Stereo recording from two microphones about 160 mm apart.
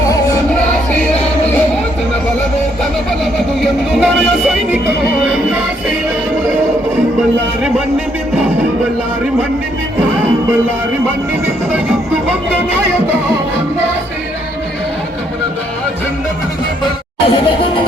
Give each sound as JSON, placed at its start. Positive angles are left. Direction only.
{"t": 0.0, "sound": "music", "side_deg": 20}
{"t": 3.6, "sound": "music", "side_deg": 0}
{"t": 17.2, "sound": "music", "side_deg": 35}